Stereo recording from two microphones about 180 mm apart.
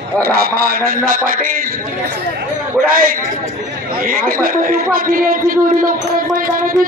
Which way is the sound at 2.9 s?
50° right (ahead or behind).